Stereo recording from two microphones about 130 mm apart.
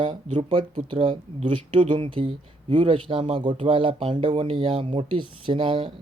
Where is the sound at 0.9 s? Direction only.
40° right (ahead or behind).